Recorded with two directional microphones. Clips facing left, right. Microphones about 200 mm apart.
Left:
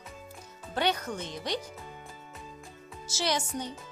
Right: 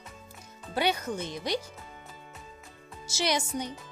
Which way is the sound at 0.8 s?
10° right (ahead or behind).